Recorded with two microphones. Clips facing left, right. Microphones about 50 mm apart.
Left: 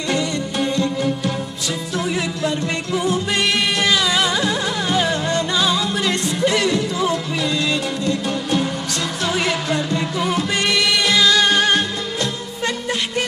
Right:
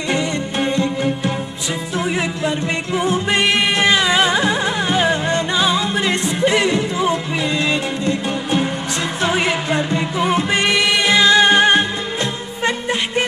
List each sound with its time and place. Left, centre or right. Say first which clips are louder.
0.1 s music: right 1 dB; right